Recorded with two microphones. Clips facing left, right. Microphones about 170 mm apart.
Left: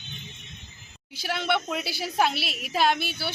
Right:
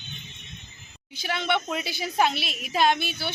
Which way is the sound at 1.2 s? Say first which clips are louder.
Even; 5° left (ahead or behind).